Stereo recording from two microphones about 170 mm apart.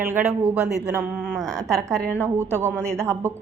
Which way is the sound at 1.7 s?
20° right (ahead or behind).